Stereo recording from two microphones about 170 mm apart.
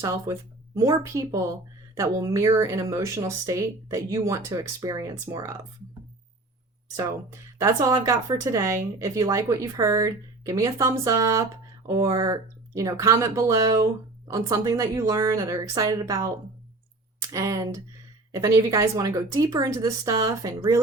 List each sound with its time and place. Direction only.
0.0 s speech: 15° right (ahead or behind)
6.9 s speech: 15° right (ahead or behind)
17.3 s speech: 20° right (ahead or behind)